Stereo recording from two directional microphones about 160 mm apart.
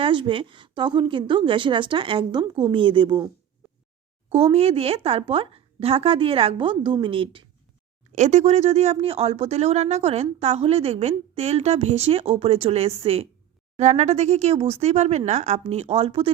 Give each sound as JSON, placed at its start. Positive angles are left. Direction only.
{"t": 0.0, "sound": "speech", "side_deg": -30}
{"t": 4.3, "sound": "speech", "side_deg": -35}
{"t": 8.1, "sound": "speech", "side_deg": -45}